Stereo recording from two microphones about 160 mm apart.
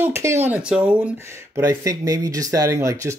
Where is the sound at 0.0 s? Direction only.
15° right (ahead or behind).